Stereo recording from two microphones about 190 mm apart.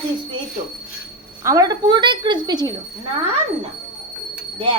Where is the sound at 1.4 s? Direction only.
20° right (ahead or behind).